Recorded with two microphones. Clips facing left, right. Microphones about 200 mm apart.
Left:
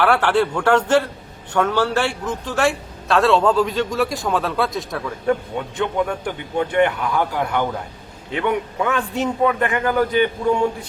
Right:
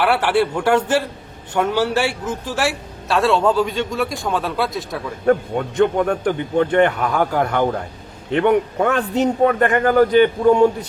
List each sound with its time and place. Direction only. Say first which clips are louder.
0.0 s a man's voice: even; 10° right (ahead or behind)
5.2 s a man's voice: right 5 dB; 50° right (ahead or behind)